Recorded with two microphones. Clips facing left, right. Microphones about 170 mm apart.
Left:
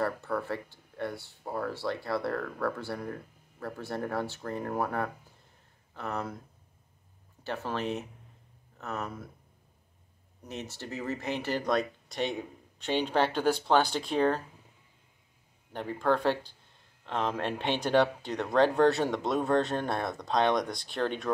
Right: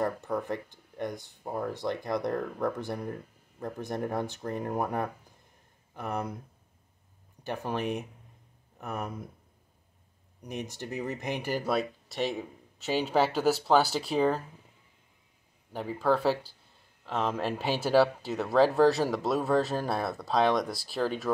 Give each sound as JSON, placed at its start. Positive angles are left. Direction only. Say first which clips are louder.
{"t": 0.0, "sound": "speech", "louder": "right 1 dB", "side_deg": -15}
{"t": 7.4, "sound": "speech", "louder": "right 1 dB", "side_deg": -15}
{"t": 10.4, "sound": "speech", "louder": "right 3 dB", "side_deg": -15}
{"t": 15.7, "sound": "speech", "louder": "right 1 dB", "side_deg": -5}